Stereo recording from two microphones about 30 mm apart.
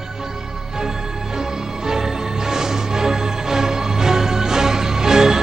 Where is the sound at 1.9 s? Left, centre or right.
Centre.